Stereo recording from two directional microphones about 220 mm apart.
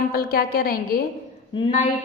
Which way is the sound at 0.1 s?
40° left (ahead or behind).